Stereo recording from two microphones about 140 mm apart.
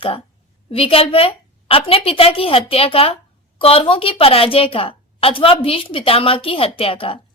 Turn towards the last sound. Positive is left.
turn(degrees=40)  # may be behind; listen again after turning